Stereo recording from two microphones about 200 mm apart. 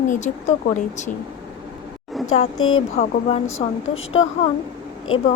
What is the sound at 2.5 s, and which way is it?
Speech, 90° left.